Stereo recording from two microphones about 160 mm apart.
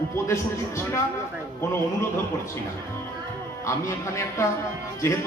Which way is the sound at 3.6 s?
20° left (ahead or behind).